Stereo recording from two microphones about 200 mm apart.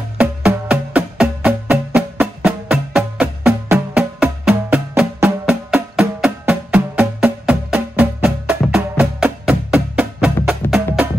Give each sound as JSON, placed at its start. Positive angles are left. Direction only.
{"t": 0.2, "sound": "music", "side_deg": -5}